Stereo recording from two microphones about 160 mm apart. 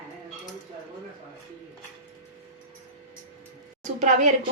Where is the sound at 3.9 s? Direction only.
50° right (ahead or behind).